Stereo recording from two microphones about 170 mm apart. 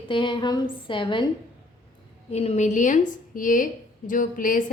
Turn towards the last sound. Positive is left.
turn(degrees=50)  # may be behind; listen again after turning